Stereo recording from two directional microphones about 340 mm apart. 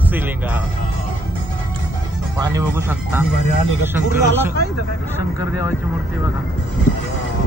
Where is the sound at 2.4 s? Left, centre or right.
Centre.